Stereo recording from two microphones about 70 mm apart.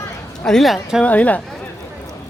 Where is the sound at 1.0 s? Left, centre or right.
Left.